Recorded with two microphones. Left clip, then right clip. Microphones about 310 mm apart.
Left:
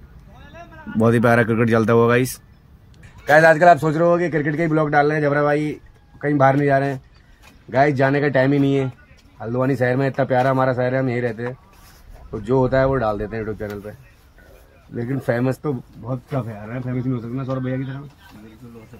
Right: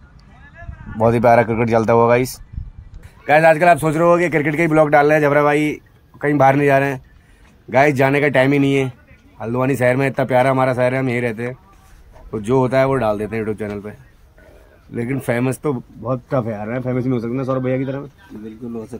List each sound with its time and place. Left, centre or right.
1.8 s a man's voice: centre
15.0 s speech: centre